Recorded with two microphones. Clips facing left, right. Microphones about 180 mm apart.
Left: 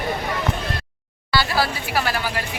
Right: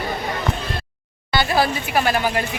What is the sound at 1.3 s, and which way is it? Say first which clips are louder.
Speech: right 3 dB; 20° right (ahead or behind).